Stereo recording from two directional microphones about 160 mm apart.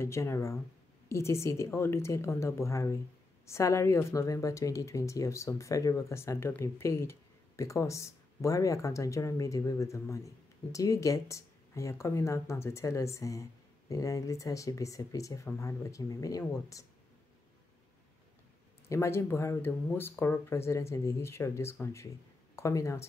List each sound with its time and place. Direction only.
0.0 s speech: 15° left (ahead or behind)
18.9 s speech: 15° left (ahead or behind)